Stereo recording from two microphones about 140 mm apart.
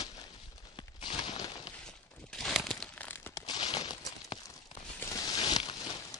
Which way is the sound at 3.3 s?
30° left (ahead or behind).